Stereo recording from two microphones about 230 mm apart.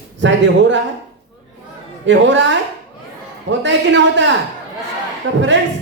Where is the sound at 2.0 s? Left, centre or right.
Right.